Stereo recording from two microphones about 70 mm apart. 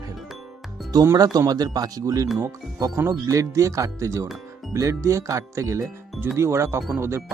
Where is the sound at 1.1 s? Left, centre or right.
Right.